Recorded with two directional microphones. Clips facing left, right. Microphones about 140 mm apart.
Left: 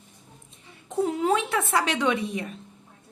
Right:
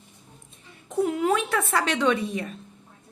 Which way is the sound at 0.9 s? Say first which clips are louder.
Right 1 dB; 30° left (ahead or behind).